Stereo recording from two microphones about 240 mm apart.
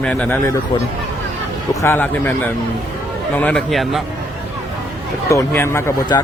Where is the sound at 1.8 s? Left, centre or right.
Centre.